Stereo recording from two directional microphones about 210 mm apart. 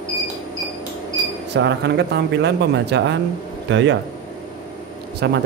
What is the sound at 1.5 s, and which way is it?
Speech, 55° right (ahead or behind).